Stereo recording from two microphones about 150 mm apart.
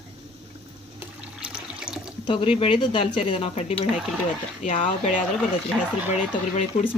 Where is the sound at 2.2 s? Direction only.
35° left (ahead or behind).